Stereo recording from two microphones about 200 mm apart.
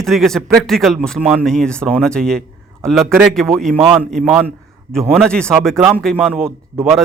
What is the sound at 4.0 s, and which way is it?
A man's voice, centre (ahead or behind).